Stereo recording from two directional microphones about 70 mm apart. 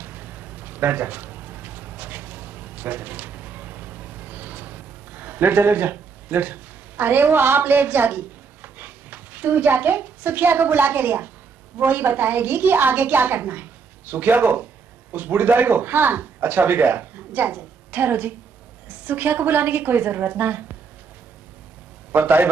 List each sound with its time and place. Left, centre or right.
0.0 s a sound: right
11.8 s a woman's voice: right
22.1 s a woman's voice: right